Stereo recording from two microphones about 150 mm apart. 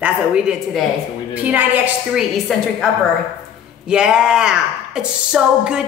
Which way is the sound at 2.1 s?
Centre (ahead or behind).